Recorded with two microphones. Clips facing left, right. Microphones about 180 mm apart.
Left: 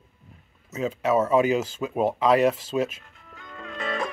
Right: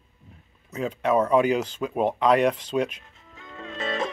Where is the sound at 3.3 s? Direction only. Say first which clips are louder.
Right 1 dB; 25° right (ahead or behind).